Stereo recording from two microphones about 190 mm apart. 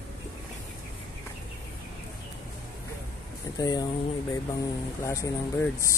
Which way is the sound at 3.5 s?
20° left (ahead or behind).